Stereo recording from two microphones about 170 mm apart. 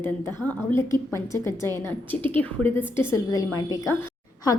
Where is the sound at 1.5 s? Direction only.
20° right (ahead or behind).